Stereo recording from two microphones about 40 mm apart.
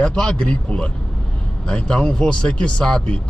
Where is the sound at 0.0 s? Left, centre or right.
Left.